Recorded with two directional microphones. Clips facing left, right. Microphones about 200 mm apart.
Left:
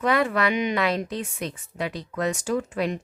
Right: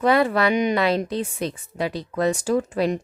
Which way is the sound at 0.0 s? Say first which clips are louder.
Right 4 dB; 35° right (ahead or behind).